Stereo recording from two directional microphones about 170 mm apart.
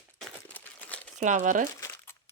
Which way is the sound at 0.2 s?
10° left (ahead or behind).